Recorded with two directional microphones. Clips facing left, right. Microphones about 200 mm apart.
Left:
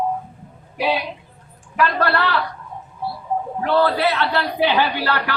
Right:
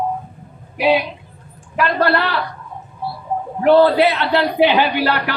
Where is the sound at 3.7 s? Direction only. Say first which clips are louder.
Right 7 dB; 20° right (ahead or behind).